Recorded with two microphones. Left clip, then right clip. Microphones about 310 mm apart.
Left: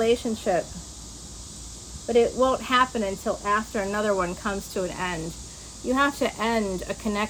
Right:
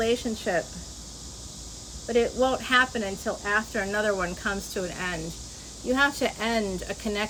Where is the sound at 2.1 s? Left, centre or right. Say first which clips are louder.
Left 3 dB; centre.